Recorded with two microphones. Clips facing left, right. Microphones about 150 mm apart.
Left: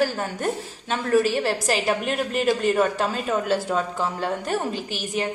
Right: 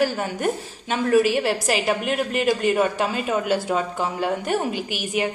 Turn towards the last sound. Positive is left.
turn(degrees=-10)  # may be behind; listen again after turning